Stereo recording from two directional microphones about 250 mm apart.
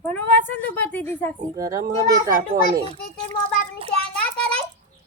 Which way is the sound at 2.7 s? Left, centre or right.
Right.